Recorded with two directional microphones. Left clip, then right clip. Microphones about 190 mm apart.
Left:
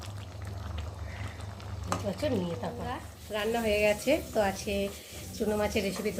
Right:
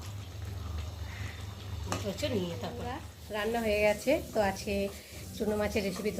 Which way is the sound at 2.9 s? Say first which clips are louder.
Left 3 dB; 5° left (ahead or behind).